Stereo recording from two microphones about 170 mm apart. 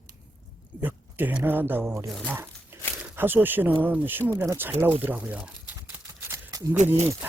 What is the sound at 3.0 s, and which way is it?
Speech, 10° right (ahead or behind).